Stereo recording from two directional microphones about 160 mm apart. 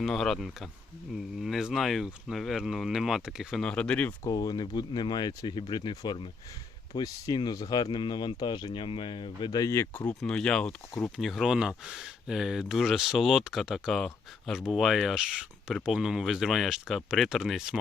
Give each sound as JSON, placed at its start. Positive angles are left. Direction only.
{"t": 0.0, "sound": "speech", "side_deg": 0}
{"t": 4.3, "sound": "speech", "side_deg": 25}